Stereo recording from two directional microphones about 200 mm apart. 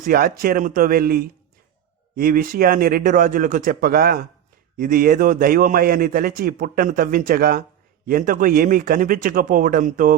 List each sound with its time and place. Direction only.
0.0 s a man's voice: 45° right (ahead or behind)